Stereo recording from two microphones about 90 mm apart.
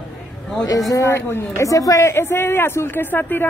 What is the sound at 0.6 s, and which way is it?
Speech, 45° left (ahead or behind).